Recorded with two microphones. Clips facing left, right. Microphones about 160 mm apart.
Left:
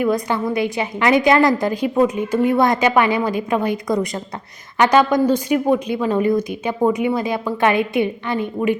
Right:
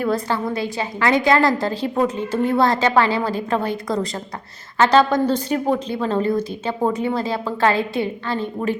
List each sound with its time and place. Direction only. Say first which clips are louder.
0.0 s a woman's voice: left 2 dB; 15° left (ahead or behind)